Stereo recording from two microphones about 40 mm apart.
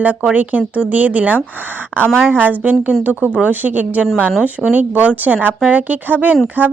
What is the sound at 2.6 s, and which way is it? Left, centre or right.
Speech, right.